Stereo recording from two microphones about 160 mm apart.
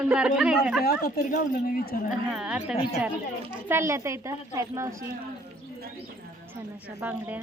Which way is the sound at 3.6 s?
15° right (ahead or behind).